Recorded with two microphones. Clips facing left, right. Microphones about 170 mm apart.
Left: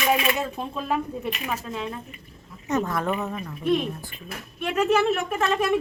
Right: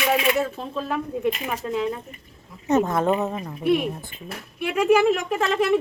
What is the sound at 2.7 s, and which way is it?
Speech, 25° right (ahead or behind).